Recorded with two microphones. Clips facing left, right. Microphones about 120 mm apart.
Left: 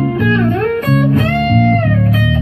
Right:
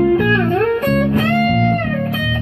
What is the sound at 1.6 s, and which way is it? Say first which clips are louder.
Music: left 4 dB; centre (ahead or behind).